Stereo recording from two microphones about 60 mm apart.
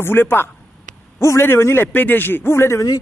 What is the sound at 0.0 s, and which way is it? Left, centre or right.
Speech, left.